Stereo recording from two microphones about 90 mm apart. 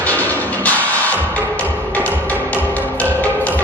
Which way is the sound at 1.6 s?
15° left (ahead or behind).